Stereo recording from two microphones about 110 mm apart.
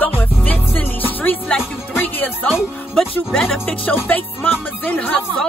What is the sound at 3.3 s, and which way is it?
Speech, centre (ahead or behind).